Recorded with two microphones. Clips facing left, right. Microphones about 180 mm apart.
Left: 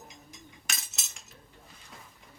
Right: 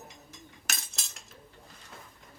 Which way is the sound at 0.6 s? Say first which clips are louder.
Right 2 dB; centre (ahead or behind).